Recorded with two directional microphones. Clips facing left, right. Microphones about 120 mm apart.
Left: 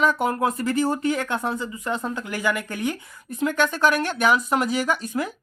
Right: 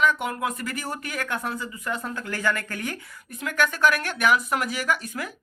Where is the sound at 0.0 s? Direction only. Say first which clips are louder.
Left 3 dB; 35° left (ahead or behind).